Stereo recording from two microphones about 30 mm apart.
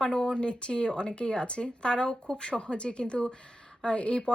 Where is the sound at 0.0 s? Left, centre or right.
Left.